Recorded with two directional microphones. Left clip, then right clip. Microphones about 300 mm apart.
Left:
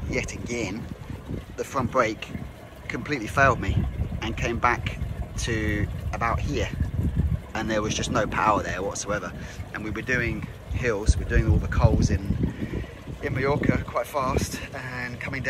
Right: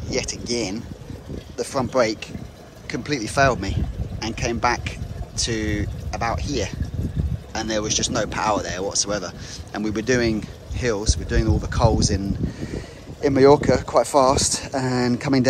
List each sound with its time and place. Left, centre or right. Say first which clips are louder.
0.1 s speech: right 4 dB; centre
13.2 s speech: right 11 dB; centre